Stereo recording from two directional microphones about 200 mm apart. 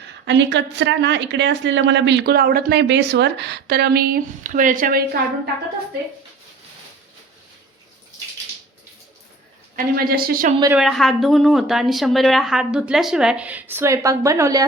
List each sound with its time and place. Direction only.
0.3 s a woman's voice: 60° right (ahead or behind); by 5.2 s 45° right (ahead or behind)
9.7 s a woman's voice: 50° right (ahead or behind)
10.8 s a woman's voice: centre (ahead or behind); by 14.6 s 15° right (ahead or behind)